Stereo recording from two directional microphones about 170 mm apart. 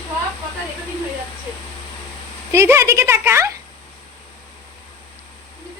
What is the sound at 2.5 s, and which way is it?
Speech, 15° right (ahead or behind).